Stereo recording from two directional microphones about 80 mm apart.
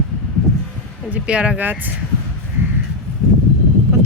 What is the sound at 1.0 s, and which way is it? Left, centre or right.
Speech, centre.